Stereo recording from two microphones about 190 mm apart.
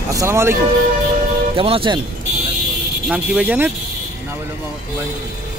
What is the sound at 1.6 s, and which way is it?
Speech, 30° right (ahead or behind).